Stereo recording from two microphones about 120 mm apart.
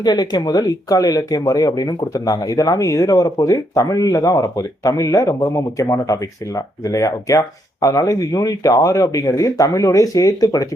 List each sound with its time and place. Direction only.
0.0 s speech: 35° left (ahead or behind)